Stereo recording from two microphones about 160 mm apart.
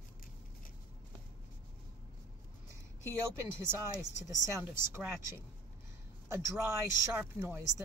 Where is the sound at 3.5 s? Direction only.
15° right (ahead or behind).